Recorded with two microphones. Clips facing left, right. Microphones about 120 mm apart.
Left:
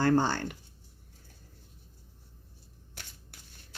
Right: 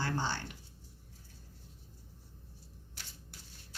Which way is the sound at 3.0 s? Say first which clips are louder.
Left 2 dB; 55° left (ahead or behind).